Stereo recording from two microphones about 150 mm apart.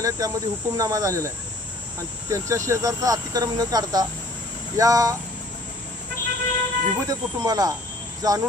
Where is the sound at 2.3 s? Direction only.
20° right (ahead or behind).